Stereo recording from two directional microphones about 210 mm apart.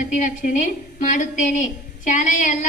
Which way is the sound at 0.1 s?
35° left (ahead or behind).